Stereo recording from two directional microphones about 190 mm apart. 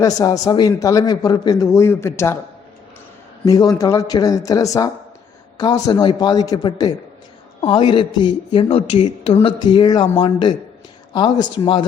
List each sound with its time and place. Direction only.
0.0 s a man's voice: 20° left (ahead or behind)
3.4 s a man's voice: 20° left (ahead or behind)